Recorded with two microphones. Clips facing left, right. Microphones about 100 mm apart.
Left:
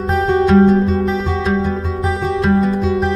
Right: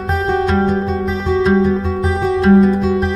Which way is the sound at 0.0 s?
Centre (ahead or behind).